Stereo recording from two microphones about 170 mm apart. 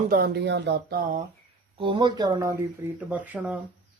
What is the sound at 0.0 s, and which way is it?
Speech, 60° right (ahead or behind).